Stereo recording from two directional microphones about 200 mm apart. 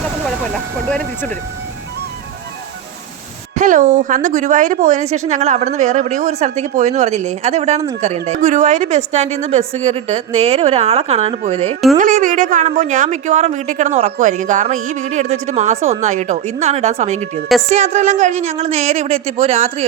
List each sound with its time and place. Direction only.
0.0 s speech: centre (ahead or behind)
3.5 s a woman's voice: 40° right (ahead or behind)
11.9 s a woman's voice: 40° right (ahead or behind)